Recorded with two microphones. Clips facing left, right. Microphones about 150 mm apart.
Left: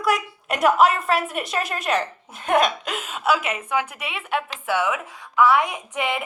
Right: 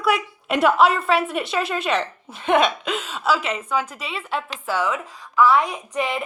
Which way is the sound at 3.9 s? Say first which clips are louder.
Left 1 dB; 60° left (ahead or behind).